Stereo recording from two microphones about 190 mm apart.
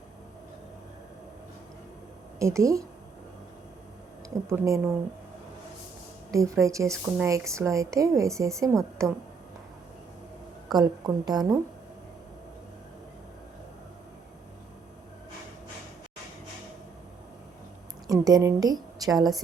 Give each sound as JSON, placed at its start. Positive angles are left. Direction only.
{"t": 2.4, "sound": "a woman's voice", "side_deg": -15}
{"t": 4.4, "sound": "a woman's voice", "side_deg": -15}
{"t": 6.3, "sound": "a woman's voice", "side_deg": -15}
{"t": 10.7, "sound": "a woman's voice", "side_deg": -20}
{"t": 18.1, "sound": "a woman's voice", "side_deg": -20}